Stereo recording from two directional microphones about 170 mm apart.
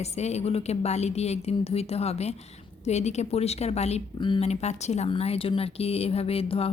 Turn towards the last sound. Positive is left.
turn(degrees=35)  # may be behind; listen again after turning